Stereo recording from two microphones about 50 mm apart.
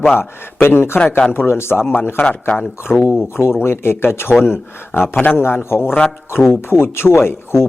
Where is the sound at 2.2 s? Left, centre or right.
Left.